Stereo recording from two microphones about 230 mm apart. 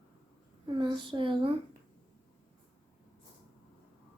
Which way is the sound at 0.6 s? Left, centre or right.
Right.